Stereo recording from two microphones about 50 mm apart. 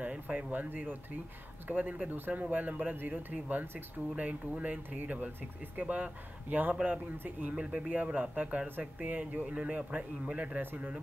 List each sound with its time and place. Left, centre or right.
0.0 s speech: right
10.6 s a man's voice: right